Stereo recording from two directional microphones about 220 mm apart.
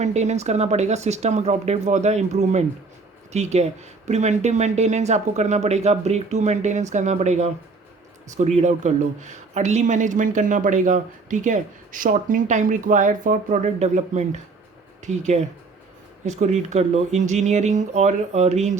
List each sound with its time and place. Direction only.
0.0 s speech: 30° right (ahead or behind)